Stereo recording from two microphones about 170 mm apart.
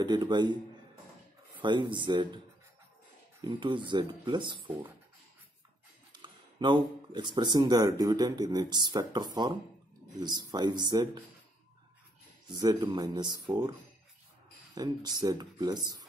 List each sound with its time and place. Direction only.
0.0 s speech: 25° right (ahead or behind)
1.6 s speech: 30° right (ahead or behind)
3.4 s speech: 30° right (ahead or behind)
6.1 s speech: 25° right (ahead or behind)
12.4 s speech: 25° right (ahead or behind)
14.8 s speech: 25° right (ahead or behind)